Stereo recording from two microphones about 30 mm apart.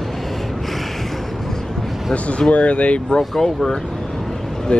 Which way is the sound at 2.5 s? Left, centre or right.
Left.